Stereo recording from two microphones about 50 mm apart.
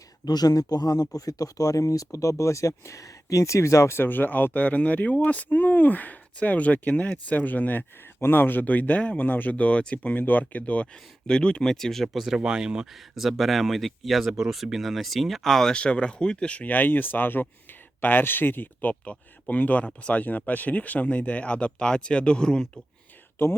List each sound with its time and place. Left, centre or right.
2.1 s speech: left
3.9 s speech: left
11.3 s speech: centre
12.0 s speech: centre
15.7 s speech: left
23.4 s speech: left